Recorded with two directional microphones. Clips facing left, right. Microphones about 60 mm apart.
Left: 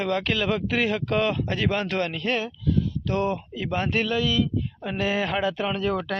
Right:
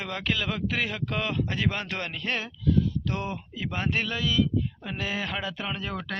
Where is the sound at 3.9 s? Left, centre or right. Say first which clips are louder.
Left 3 dB; centre.